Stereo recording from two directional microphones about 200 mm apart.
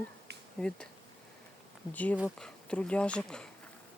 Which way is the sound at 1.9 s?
5° left (ahead or behind).